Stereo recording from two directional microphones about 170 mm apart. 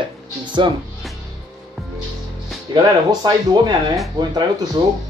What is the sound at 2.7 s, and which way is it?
Speech, 25° right (ahead or behind).